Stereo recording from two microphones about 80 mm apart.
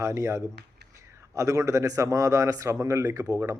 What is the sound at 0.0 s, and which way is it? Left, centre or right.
A man's voice, right.